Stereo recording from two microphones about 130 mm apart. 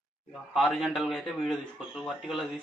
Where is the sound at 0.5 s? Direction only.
Centre (ahead or behind).